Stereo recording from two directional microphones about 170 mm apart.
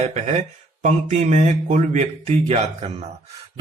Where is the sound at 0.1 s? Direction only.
40° right (ahead or behind).